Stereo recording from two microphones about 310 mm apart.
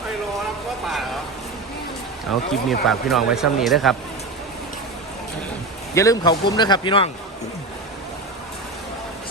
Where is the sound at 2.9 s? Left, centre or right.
Centre.